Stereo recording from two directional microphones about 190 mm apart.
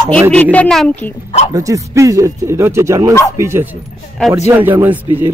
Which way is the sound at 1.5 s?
20° right (ahead or behind).